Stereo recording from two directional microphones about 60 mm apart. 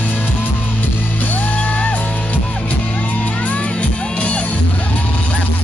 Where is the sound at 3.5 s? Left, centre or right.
Centre.